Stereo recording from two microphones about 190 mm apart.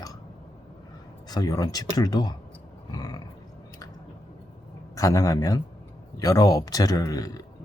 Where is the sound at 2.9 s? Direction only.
20° left (ahead or behind).